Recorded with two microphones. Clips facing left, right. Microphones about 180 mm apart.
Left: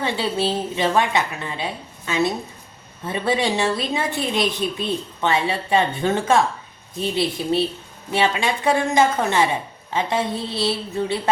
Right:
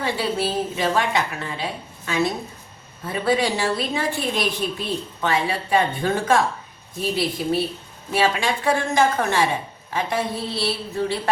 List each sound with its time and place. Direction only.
0.0 s a woman's voice: 25° left (ahead or behind)